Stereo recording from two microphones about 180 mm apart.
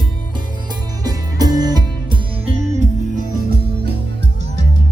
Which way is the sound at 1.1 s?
20° right (ahead or behind).